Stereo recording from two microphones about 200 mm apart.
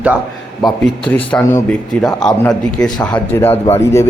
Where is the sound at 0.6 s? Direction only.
5° left (ahead or behind).